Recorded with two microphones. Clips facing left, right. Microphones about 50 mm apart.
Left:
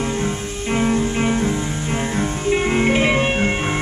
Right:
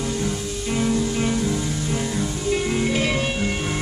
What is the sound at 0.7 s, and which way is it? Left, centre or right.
Music, left.